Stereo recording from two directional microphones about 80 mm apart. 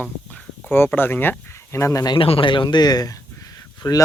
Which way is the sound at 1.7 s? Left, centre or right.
Left.